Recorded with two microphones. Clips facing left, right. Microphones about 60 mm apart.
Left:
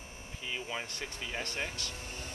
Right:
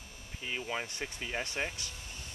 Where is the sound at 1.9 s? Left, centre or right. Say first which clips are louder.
Left 4 dB; left.